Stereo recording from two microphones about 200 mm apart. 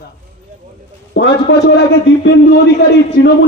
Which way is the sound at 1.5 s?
60° left (ahead or behind).